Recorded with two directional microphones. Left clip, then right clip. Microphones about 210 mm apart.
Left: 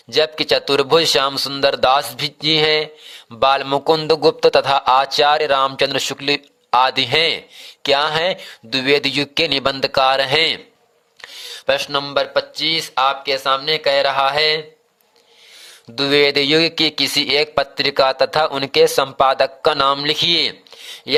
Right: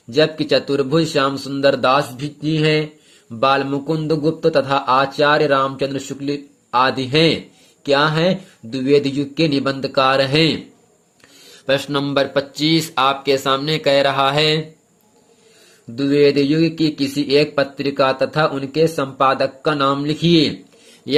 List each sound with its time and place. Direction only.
0.1 s speech: 40° left (ahead or behind)
11.6 s speech: 30° left (ahead or behind)
16.0 s speech: 45° left (ahead or behind)